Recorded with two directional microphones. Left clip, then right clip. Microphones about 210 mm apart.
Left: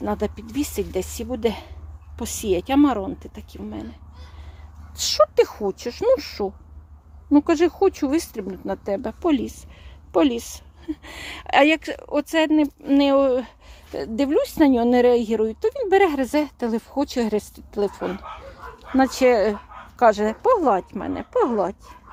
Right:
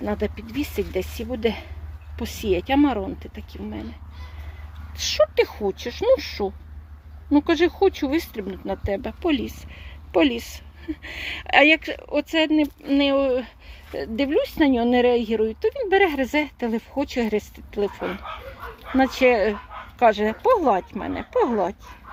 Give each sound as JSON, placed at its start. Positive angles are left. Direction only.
{"t": 0.0, "sound": "speech", "side_deg": 15}
{"t": 4.9, "sound": "speech", "side_deg": 15}